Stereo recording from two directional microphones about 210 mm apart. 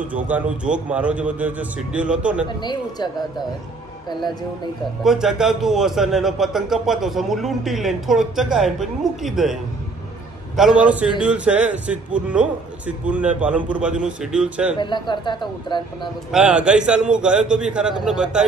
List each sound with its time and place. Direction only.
0.1 s a man's voice: 5° right (ahead or behind)
2.4 s speech: 20° left (ahead or behind)
5.0 s a man's voice: centre (ahead or behind)
14.8 s speech: 20° left (ahead or behind)
16.3 s a man's voice: 5° right (ahead or behind)